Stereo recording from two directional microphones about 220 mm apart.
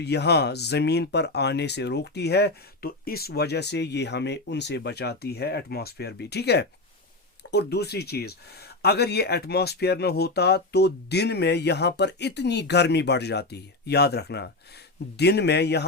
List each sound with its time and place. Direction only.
0.0 s speech: 50° left (ahead or behind)